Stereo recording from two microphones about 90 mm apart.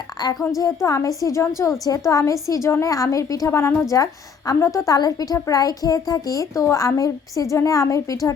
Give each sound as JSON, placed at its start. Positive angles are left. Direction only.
{"t": 0.2, "sound": "a woman's voice", "side_deg": 50}
{"t": 0.6, "sound": "a woman's voice", "side_deg": 40}
{"t": 3.9, "sound": "a woman's voice", "side_deg": 40}